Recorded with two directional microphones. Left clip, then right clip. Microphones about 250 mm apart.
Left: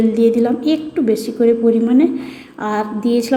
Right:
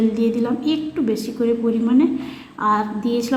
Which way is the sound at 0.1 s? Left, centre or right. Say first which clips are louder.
Left 7 dB; centre.